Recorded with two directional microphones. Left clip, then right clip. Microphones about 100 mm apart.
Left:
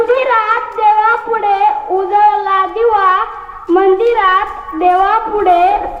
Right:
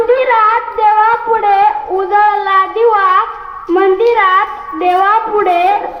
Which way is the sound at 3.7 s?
50° left (ahead or behind).